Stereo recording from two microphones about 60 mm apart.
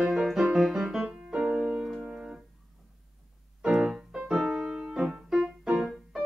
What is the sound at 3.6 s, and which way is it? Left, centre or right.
Keyboard, centre.